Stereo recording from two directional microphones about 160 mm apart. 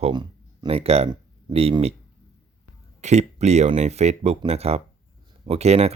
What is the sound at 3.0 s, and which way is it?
Speech, 45° right (ahead or behind).